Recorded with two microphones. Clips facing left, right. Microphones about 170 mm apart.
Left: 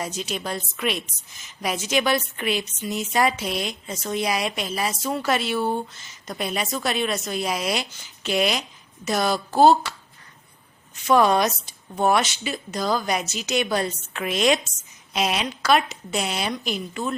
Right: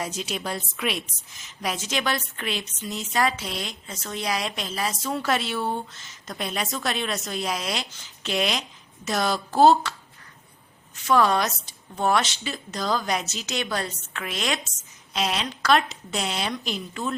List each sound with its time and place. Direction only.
0.0 s a woman's voice: 5° right (ahead or behind)
11.0 s a woman's voice: 15° left (ahead or behind)
13.7 s a woman's voice: 15° left (ahead or behind)